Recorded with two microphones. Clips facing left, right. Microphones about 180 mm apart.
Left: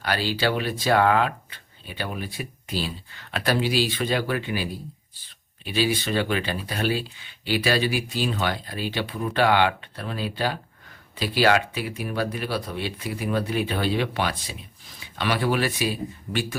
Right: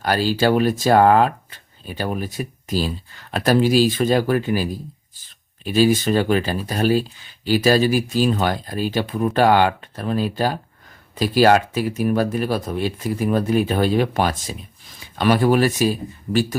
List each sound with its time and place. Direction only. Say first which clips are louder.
0.0 s speech: right 6 dB; 45° right (ahead or behind)